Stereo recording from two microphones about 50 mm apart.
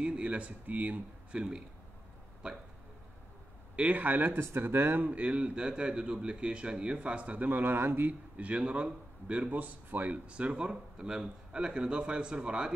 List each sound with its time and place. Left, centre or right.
0.0 s speech: right
3.7 s speech: right
4.4 s speech: right
5.1 s speech: right
8.1 s speech: right